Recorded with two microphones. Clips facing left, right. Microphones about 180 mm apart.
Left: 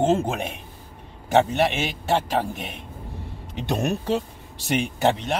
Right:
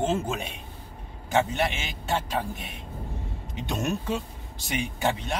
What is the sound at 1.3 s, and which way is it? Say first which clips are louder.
A man's voice: left 6 dB; 65° left (ahead or behind).